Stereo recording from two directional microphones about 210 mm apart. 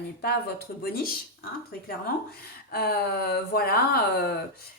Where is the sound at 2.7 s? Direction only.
50° left (ahead or behind).